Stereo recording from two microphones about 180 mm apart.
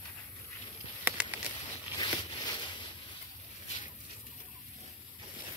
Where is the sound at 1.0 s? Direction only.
10° right (ahead or behind).